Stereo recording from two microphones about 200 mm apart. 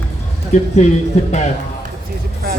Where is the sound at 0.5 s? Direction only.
35° left (ahead or behind).